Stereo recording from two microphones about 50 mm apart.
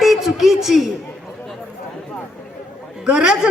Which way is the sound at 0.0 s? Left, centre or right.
Centre.